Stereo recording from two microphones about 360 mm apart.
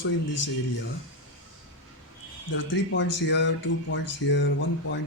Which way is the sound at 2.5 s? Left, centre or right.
Left.